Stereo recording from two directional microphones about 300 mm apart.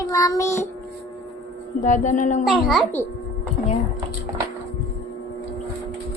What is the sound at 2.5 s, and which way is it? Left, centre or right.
Speech, centre.